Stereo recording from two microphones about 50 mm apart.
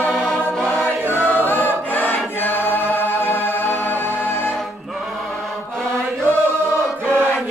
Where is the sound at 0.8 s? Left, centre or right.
Left.